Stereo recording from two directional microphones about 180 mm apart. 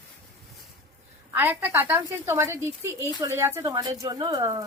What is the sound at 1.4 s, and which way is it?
Speech, 10° right (ahead or behind).